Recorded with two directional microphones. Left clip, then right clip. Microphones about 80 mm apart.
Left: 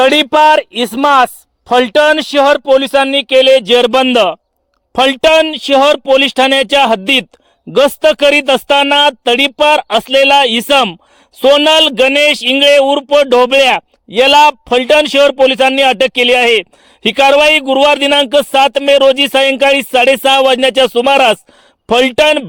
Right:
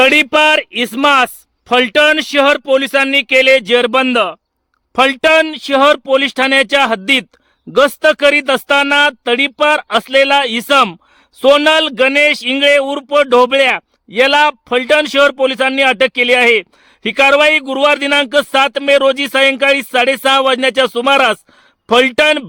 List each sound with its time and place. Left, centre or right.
0.1 s a man's voice: left
0.4 s speech: centre
4.1 s a man's voice: left